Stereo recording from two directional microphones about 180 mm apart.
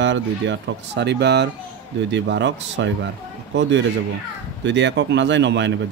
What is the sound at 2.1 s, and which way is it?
Speech, 80° right.